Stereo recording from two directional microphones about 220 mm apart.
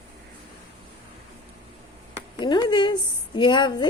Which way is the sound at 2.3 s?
20° left (ahead or behind).